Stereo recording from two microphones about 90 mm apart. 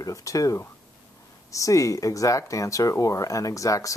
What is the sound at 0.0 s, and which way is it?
Speech, 40° left (ahead or behind).